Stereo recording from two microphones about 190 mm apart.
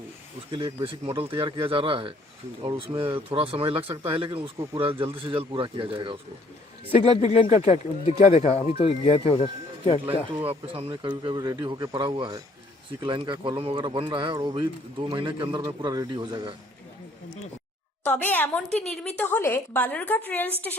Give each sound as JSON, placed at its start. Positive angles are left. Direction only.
{"t": 0.5, "sound": "speech", "side_deg": -25}
{"t": 6.9, "sound": "speech", "side_deg": 30}
{"t": 10.4, "sound": "speech", "side_deg": -30}
{"t": 18.0, "sound": "a woman's voice", "side_deg": 10}